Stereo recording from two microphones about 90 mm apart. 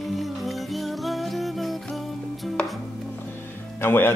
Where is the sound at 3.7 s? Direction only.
25° left (ahead or behind).